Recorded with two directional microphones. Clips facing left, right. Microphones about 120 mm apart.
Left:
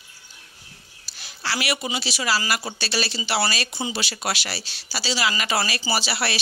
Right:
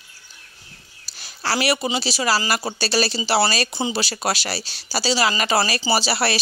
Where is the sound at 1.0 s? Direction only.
40° right (ahead or behind).